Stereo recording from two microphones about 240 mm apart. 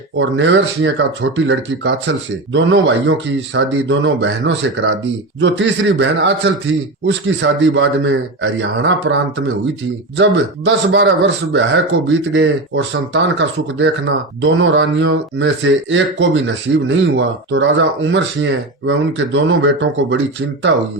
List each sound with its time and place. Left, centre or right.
0.2 s speech: right